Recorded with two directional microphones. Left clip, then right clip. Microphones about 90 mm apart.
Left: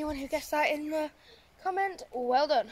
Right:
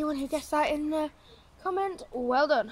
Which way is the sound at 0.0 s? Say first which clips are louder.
Right 2 dB; 30° right (ahead or behind).